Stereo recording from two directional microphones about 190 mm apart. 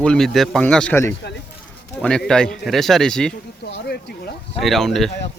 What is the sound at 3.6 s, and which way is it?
Speech, 70° left (ahead or behind).